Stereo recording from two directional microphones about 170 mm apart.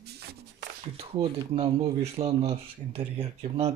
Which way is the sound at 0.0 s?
70° right (ahead or behind).